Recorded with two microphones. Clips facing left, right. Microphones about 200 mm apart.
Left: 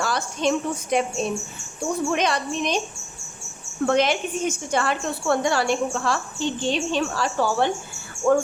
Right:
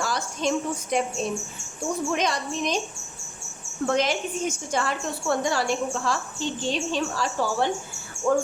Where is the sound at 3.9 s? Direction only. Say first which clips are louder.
Left 3 dB; 65° left (ahead or behind).